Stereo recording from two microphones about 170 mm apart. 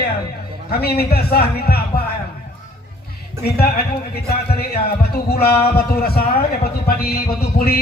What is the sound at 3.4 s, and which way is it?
Speech, 65° left (ahead or behind).